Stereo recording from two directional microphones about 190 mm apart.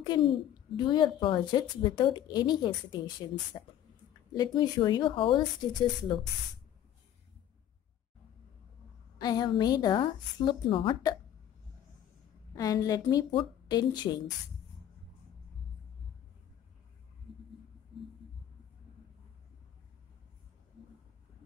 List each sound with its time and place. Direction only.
0.0 s a child's voice: 25° left (ahead or behind)
9.2 s a child's voice: 20° left (ahead or behind)
12.5 s a child's voice: 20° left (ahead or behind)